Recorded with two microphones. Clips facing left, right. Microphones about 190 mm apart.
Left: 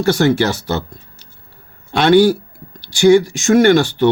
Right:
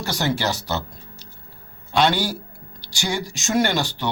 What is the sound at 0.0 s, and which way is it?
Speech, 55° left (ahead or behind).